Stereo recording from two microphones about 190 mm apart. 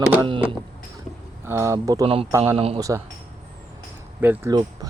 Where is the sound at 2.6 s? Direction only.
30° right (ahead or behind).